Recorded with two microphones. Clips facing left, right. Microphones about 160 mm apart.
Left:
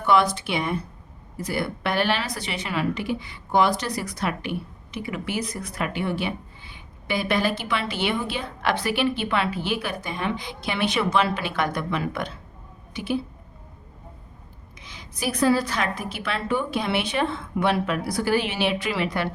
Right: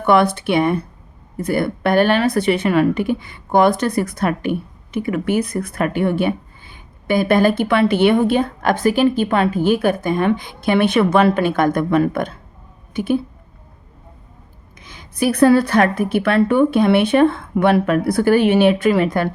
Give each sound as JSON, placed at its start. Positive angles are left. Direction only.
{"t": 0.0, "sound": "a woman's voice", "side_deg": -55}
{"t": 14.8, "sound": "a woman's voice", "side_deg": -55}